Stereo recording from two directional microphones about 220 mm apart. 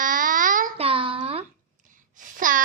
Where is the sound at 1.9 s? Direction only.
35° right (ahead or behind).